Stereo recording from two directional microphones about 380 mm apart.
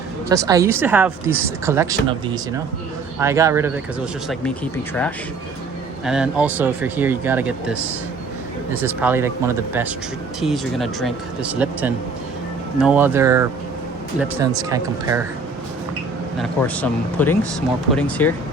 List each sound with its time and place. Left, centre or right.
0.3 s speech: centre
6.1 s speech: centre
8.8 s speech: centre
16.4 s speech: centre